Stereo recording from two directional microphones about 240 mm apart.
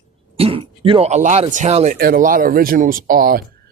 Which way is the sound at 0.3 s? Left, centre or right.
Right.